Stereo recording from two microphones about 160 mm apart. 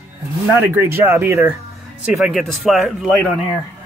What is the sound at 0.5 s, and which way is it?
Speech, 15° right (ahead or behind).